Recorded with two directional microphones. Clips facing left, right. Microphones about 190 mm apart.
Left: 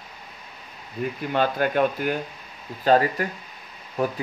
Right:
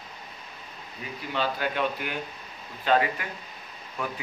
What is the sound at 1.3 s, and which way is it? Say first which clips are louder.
Speech: left 6 dB; 50° left (ahead or behind).